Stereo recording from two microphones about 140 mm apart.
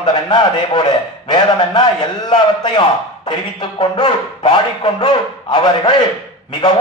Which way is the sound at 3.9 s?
35° left (ahead or behind).